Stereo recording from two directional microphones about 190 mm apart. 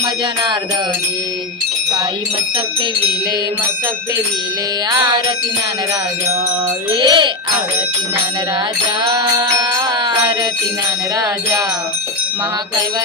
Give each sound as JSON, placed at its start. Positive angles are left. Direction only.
{"t": 4.9, "sound": "music", "side_deg": -25}
{"t": 6.9, "sound": "music", "side_deg": -25}
{"t": 9.0, "sound": "music", "side_deg": -25}